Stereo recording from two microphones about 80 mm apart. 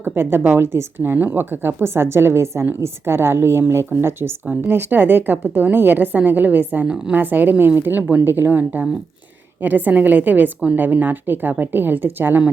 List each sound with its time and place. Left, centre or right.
0.0 s a woman's voice: right
4.4 s a woman's voice: centre